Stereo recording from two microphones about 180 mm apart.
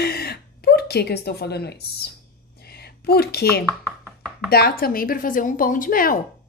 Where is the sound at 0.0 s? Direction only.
60° left (ahead or behind).